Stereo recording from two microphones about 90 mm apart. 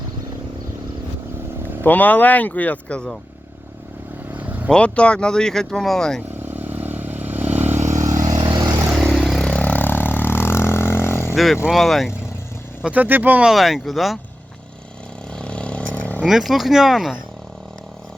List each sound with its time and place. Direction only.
1.8 s speech: 20° left (ahead or behind)
4.3 s vehicle: 20° right (ahead or behind)
4.7 s speech: 10° left (ahead or behind)
6.4 s vehicle: 20° right (ahead or behind)
7.9 s vehicle: 40° right (ahead or behind)
8.4 s vehicle: 55° right (ahead or behind)
9.1 s vehicle: centre (ahead or behind)
9.5 s vehicle: 15° left (ahead or behind)
11.3 s speech: centre (ahead or behind)
12.8 s speech: 20° right (ahead or behind)
13.5 s speech: 5° right (ahead or behind)
15.4 s vehicle: 10° left (ahead or behind)
16.2 s speech: centre (ahead or behind)